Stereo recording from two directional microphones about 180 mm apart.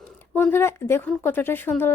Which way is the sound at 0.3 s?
10° left (ahead or behind).